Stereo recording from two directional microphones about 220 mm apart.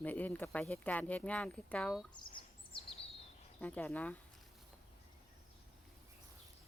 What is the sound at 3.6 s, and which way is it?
Speech, 10° left (ahead or behind).